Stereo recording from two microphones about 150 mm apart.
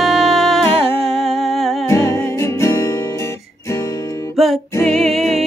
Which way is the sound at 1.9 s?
20° left (ahead or behind).